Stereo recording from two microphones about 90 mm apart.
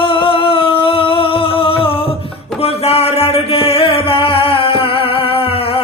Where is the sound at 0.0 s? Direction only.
75° left (ahead or behind).